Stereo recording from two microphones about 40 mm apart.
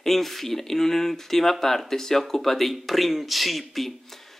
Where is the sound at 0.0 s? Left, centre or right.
Centre.